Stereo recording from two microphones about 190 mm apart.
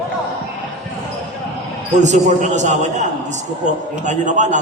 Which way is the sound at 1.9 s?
40° right (ahead or behind).